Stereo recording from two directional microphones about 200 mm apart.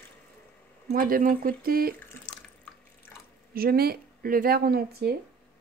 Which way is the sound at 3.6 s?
50° right (ahead or behind).